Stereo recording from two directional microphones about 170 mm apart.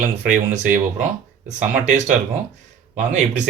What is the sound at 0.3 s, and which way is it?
Speech, 45° right (ahead or behind).